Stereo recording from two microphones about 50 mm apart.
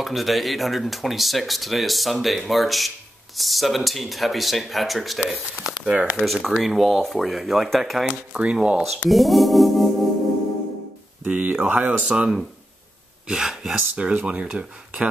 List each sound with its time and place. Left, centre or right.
0.0 s speech: centre
6.2 s speech: centre
8.1 s speech: right
8.8 s speech: centre
11.2 s speech: right
13.3 s speech: centre
13.9 s speech: right